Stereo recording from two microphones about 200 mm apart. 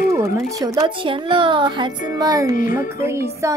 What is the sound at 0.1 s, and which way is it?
A woman's voice, 15° right (ahead or behind).